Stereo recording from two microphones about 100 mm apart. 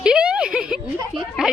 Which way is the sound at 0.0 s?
10° right (ahead or behind).